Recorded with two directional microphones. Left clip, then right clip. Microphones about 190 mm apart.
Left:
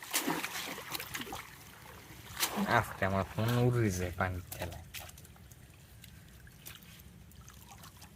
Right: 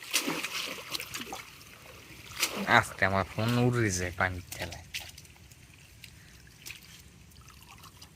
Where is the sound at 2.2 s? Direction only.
10° left (ahead or behind).